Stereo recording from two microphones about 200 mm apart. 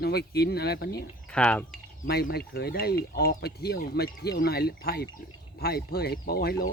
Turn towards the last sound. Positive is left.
turn(degrees=50)  # may be behind; listen again after turning